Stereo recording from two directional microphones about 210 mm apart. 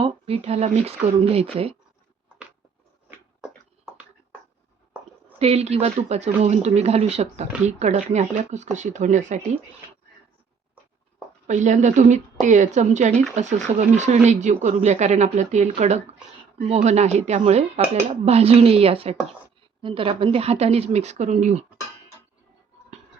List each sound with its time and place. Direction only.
0.0 s a woman's voice: 30° right (ahead or behind)
5.4 s speech: 30° right (ahead or behind)
11.4 s a woman's voice: 35° right (ahead or behind)